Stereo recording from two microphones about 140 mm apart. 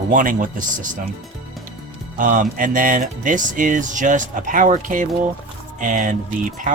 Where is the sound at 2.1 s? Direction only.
70° right (ahead or behind).